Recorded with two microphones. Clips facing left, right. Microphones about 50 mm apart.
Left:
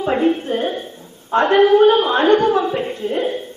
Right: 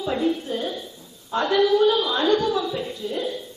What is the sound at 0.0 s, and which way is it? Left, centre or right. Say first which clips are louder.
A woman's voice: left 6 dB; left.